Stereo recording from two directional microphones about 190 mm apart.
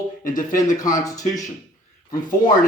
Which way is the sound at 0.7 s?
20° left (ahead or behind).